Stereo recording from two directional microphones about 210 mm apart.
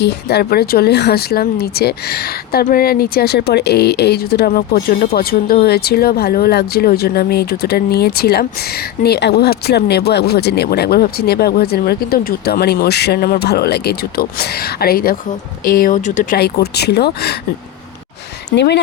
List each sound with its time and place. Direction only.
0.0 s speech: 50° left (ahead or behind); by 16.4 s 35° left (ahead or behind)
16.4 s speech: 50° left (ahead or behind)
18.5 s speech: 55° left (ahead or behind)